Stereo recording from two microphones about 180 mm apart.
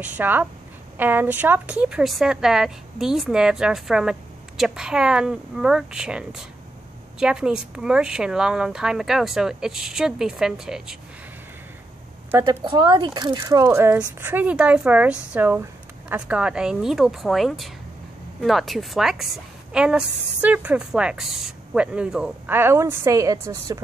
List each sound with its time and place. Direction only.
0.0 s a woman's voice: 10° right (ahead or behind)
12.3 s a woman's voice: 15° right (ahead or behind)